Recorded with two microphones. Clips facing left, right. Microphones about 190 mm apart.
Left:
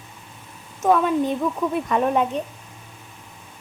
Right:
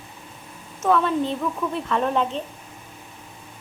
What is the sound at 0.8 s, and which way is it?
A woman's voice, 15° left (ahead or behind).